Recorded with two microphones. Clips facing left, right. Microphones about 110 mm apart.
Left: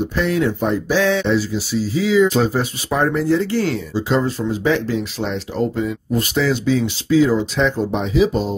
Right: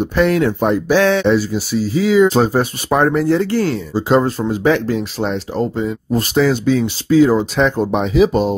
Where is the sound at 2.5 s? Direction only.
55° right (ahead or behind).